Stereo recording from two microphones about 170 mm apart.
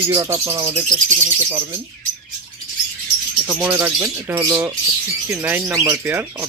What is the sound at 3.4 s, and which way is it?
Speech, 5° right (ahead or behind).